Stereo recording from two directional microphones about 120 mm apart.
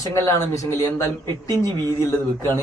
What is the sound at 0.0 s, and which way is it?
Speech, 25° left (ahead or behind).